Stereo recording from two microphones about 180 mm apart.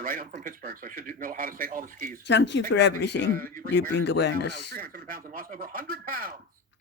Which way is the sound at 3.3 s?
50° right (ahead or behind).